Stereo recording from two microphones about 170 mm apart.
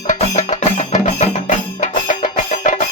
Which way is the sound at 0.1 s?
45° left (ahead or behind).